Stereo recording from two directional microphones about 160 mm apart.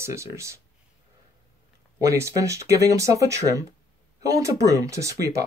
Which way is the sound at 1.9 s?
20° right (ahead or behind).